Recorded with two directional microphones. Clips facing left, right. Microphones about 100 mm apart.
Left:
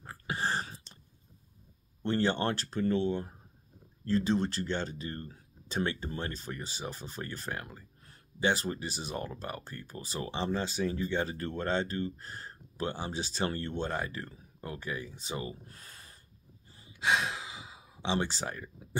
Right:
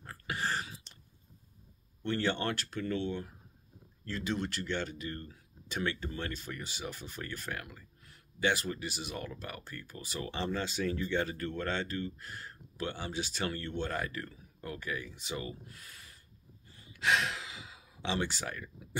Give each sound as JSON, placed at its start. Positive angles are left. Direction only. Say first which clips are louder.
{"t": 0.0, "sound": "a sound", "louder": "left 2 dB", "side_deg": 25}
{"t": 2.0, "sound": "speech", "louder": "left 3 dB", "side_deg": 30}
{"t": 16.7, "sound": "sigh", "louder": "left 1 dB", "side_deg": 20}